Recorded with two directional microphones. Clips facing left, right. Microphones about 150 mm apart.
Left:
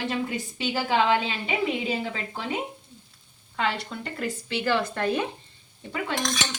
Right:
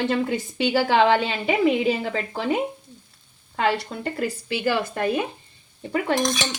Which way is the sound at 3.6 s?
40° right (ahead or behind).